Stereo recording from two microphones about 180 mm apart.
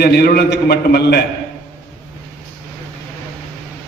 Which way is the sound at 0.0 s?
60° left (ahead or behind).